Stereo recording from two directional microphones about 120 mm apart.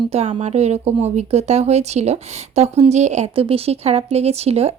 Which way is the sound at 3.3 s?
50° right (ahead or behind).